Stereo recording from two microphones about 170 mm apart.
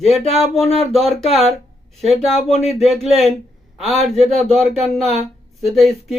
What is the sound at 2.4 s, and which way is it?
Speech, 40° left (ahead or behind).